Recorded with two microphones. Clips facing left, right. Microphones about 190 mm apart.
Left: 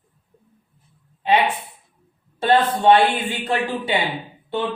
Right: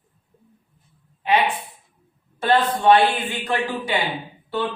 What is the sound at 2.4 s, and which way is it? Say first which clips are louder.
A man's voice: left 2 dB; 25° left (ahead or behind).